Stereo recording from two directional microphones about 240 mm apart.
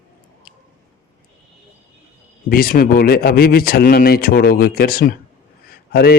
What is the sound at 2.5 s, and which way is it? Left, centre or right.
A man's voice, left.